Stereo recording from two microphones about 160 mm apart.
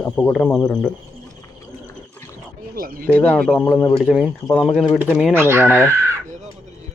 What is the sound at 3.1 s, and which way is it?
A man's voice, 10° left (ahead or behind).